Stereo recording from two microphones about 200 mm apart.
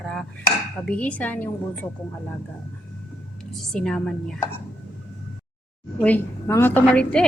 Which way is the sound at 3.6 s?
5° left (ahead or behind).